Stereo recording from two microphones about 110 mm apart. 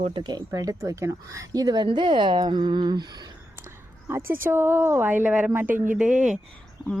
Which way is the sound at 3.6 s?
20° right (ahead or behind).